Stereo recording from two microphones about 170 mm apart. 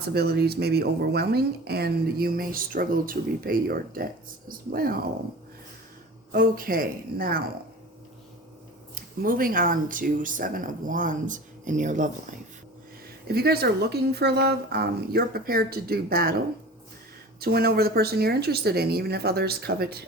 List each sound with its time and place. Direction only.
0.1 s speech: 70° right (ahead or behind)
6.3 s speech: 55° right (ahead or behind)
9.2 s speech: 55° right (ahead or behind)
13.2 s speech: 70° right (ahead or behind)
17.4 s speech: 65° right (ahead or behind)